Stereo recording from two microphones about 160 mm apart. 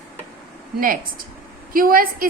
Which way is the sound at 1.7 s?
60° right (ahead or behind).